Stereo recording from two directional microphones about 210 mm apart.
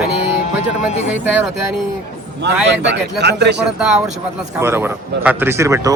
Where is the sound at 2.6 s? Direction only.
55° right (ahead or behind).